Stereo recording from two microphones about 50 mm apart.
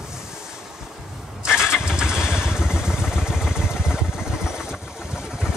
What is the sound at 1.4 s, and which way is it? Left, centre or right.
Vehicle, centre.